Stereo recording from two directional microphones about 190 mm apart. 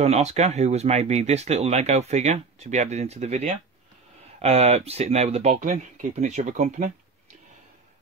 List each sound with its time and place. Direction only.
0.0 s speech: 35° right (ahead or behind)